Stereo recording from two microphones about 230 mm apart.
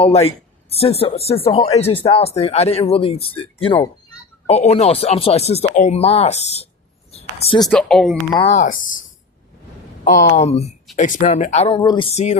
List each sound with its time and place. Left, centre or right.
0.0 s speech: left
7.7 s speech: centre
8.5 s speech: left